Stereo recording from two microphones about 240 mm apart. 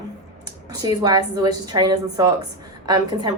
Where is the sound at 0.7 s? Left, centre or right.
Centre.